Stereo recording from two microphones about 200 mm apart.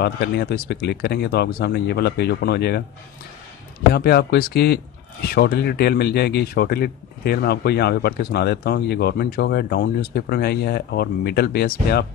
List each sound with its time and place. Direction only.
0.0 s speech: 55° left (ahead or behind)
3.9 s speech: 55° left (ahead or behind)